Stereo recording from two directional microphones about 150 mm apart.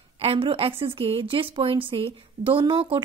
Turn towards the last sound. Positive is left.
turn(degrees=-35)  # may be behind; listen again after turning